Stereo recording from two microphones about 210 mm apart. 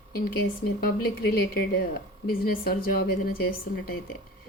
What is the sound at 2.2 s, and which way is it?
A woman's voice, 45° left (ahead or behind).